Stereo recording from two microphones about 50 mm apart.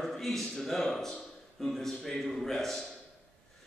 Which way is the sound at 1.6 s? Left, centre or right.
Centre.